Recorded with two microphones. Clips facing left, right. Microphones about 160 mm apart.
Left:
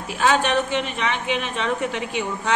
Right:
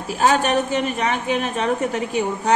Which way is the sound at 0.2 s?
40° right (ahead or behind).